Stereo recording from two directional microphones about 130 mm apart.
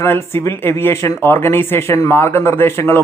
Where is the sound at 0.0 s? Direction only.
20° left (ahead or behind).